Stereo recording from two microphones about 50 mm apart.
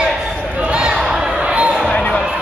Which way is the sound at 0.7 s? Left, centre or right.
Centre.